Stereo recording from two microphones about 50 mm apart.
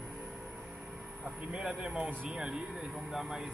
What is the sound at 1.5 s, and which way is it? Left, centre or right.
Speech, centre.